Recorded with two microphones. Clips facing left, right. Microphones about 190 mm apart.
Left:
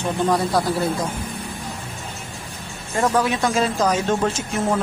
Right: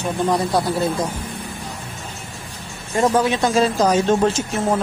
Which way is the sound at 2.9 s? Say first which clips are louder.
Right 3 dB; 25° right (ahead or behind).